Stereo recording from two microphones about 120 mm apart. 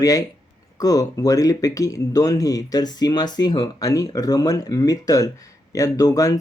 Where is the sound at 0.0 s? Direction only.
30° left (ahead or behind).